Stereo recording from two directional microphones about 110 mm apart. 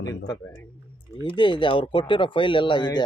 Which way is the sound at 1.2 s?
50° left (ahead or behind).